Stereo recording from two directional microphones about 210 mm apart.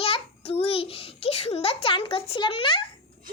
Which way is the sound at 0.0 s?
30° left (ahead or behind).